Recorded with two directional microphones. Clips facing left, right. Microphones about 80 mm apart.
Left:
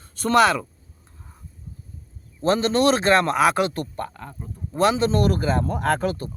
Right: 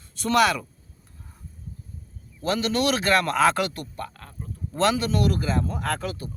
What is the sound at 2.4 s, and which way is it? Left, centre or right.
Speech, left.